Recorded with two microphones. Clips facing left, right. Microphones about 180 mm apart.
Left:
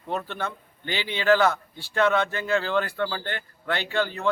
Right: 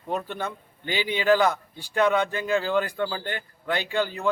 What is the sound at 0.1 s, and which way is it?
A man's voice, 15° right (ahead or behind).